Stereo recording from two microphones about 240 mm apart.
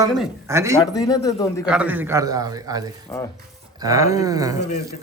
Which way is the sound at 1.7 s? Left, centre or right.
Centre.